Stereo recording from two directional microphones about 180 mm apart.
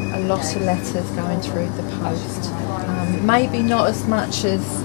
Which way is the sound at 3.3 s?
15° left (ahead or behind).